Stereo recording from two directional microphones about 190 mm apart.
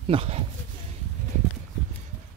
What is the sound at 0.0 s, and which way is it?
Speech, 30° right (ahead or behind).